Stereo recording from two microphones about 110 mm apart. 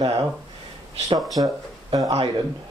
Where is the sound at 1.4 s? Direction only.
35° right (ahead or behind).